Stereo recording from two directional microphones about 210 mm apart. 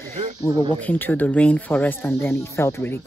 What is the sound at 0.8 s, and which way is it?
Speech, 10° left (ahead or behind).